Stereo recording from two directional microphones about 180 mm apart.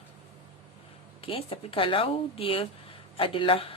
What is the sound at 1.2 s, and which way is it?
A woman's voice, 30° left (ahead or behind).